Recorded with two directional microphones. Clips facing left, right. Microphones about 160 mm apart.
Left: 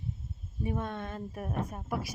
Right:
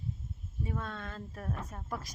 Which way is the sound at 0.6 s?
20° left (ahead or behind).